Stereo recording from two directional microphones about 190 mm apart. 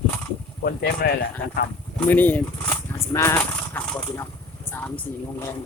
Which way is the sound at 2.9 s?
15° left (ahead or behind).